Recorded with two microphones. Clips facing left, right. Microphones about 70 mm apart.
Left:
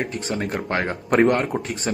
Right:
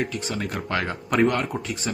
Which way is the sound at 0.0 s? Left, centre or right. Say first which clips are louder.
Left 2 dB; left.